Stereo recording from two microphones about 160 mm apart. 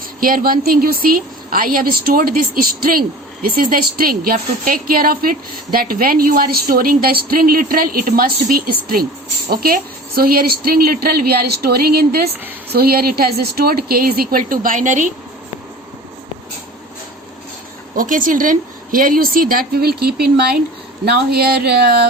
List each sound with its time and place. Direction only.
0.2 s a woman's voice: 65° right (ahead or behind)
17.9 s a woman's voice: 55° right (ahead or behind); by 22.0 s 75° right (ahead or behind)